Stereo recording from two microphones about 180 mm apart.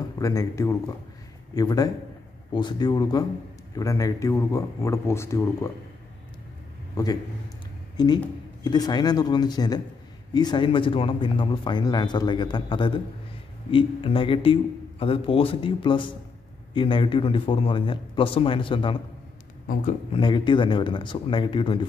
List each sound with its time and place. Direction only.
0.2 s a man's voice: 20° left (ahead or behind)
7.0 s speech: 20° left (ahead or behind)
19.7 s speech: 45° left (ahead or behind)
20.1 s speech: 25° left (ahead or behind)